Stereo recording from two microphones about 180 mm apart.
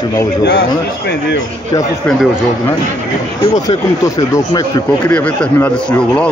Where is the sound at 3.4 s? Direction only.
30° left (ahead or behind).